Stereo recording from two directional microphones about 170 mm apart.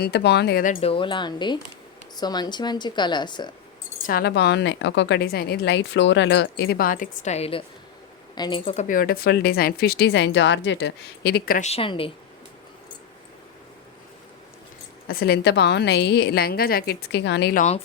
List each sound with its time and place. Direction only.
0.0 s a woman's voice: 80° left
0.8 s a woman's voice: 35° left (ahead or behind)
4.0 s a woman's voice: 65° left (ahead or behind); by 8.7 s 30° left (ahead or behind)
8.7 s speech: 45° left (ahead or behind)
11.6 s speech: 35° left (ahead or behind)
15.0 s a woman's voice: 65° left (ahead or behind); by 17.5 s 90° left
17.5 s a woman's voice: 45° left (ahead or behind)